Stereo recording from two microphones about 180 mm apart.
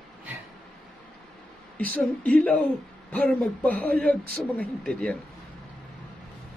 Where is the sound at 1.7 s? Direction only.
10° left (ahead or behind).